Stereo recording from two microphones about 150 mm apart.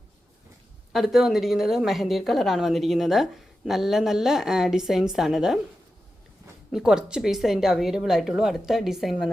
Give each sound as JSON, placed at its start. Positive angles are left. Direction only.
{"t": 0.9, "sound": "a woman's voice", "side_deg": 0}
{"t": 6.7, "sound": "a woman's voice", "side_deg": -5}